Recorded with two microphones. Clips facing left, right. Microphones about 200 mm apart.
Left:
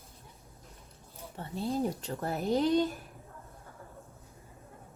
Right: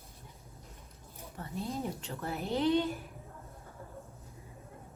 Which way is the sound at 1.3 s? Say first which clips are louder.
Left 5 dB; 30° left (ahead or behind).